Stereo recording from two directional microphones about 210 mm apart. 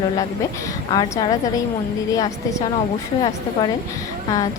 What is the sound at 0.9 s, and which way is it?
Speech, 20° left (ahead or behind).